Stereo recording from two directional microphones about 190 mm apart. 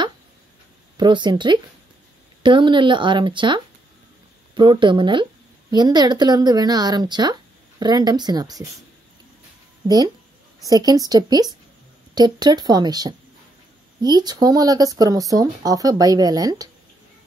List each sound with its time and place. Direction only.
0.9 s speech: 25° right (ahead or behind)
9.8 s speech: 20° right (ahead or behind)